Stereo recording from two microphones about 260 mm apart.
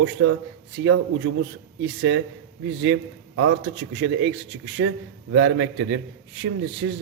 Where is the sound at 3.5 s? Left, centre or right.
Right.